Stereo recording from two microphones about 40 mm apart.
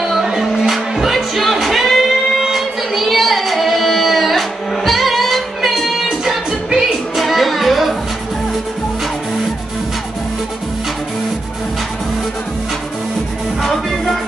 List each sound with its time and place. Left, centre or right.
0.0 s music: centre
2.4 s singing: centre
13.6 s music: centre